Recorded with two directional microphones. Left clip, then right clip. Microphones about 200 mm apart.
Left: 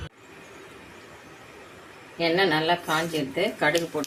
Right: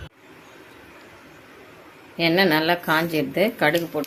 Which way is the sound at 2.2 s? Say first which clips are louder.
Right 3 dB; 50° right (ahead or behind).